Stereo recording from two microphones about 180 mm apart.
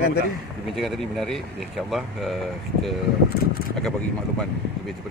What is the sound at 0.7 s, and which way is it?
Speech, centre (ahead or behind).